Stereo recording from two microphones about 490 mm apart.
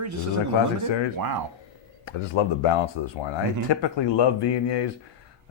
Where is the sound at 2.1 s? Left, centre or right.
Left.